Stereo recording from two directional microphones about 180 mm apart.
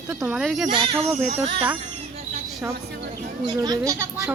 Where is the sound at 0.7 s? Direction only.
30° right (ahead or behind).